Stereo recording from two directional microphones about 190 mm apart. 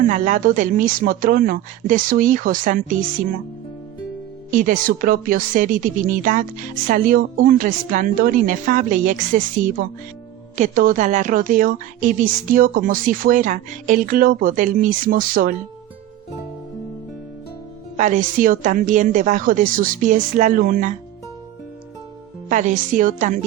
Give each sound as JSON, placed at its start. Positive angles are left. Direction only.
{"t": 0.1, "sound": "a woman's voice", "side_deg": -45}
{"t": 4.5, "sound": "a woman's voice", "side_deg": -45}
{"t": 10.5, "sound": "a woman's voice", "side_deg": -45}
{"t": 17.9, "sound": "a woman's voice", "side_deg": -40}
{"t": 22.4, "sound": "a woman's voice", "side_deg": -40}